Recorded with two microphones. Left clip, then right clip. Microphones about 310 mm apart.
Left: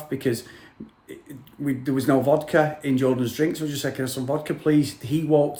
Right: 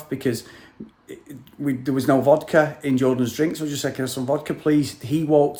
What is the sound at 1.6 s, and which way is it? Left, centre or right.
Speech, centre.